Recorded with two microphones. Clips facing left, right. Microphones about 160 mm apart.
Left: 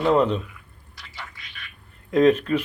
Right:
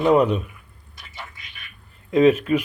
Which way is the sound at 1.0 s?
20° right (ahead or behind).